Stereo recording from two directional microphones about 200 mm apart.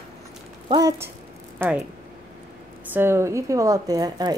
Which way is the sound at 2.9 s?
10° right (ahead or behind).